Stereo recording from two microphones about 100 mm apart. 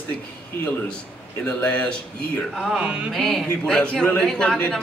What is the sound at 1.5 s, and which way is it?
Speech, 15° left (ahead or behind).